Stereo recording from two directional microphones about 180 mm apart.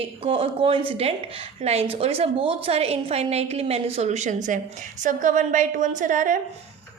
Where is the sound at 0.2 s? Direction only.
30° right (ahead or behind); by 6.4 s 45° right (ahead or behind).